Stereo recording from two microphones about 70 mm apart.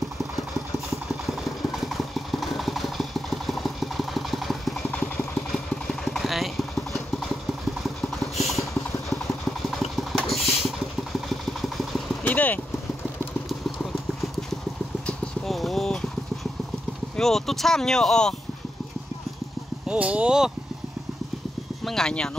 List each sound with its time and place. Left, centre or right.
0.4 s vehicle: centre
8.4 s vehicle: centre
12.2 s clip-clop: left
15.4 s a sound: centre
17.2 s speech: centre
19.9 s speech: centre
21.8 s speech: centre